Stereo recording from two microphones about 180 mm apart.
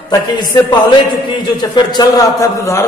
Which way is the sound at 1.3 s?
25° left (ahead or behind).